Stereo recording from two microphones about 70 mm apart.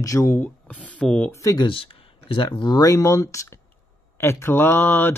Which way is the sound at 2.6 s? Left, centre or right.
Left.